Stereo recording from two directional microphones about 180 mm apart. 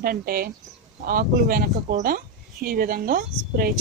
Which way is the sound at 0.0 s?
55° right (ahead or behind).